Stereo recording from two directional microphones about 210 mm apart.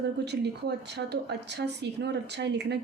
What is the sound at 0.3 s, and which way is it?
Speech, 50° right (ahead or behind).